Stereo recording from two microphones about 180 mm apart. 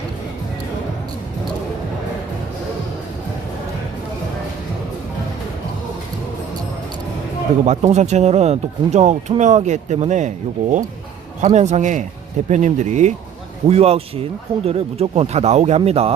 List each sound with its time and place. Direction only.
7.6 s speech: 40° right (ahead or behind)